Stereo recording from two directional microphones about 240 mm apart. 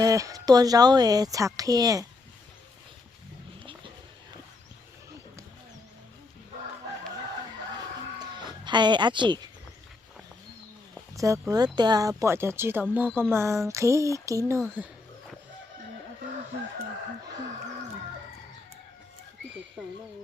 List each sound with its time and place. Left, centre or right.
0.0 s speech: centre
8.6 s a woman's voice: centre
11.1 s speech: centre